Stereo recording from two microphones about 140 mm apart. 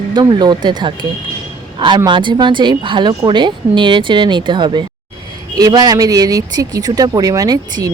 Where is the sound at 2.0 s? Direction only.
35° right (ahead or behind).